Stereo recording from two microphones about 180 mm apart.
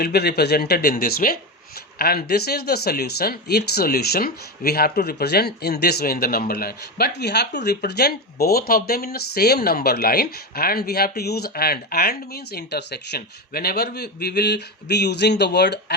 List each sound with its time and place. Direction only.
0.0 s speech: 60° left (ahead or behind)